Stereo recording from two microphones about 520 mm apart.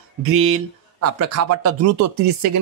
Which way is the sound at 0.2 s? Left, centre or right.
Right.